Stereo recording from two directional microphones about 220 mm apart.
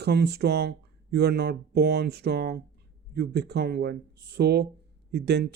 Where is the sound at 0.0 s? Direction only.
45° right (ahead or behind).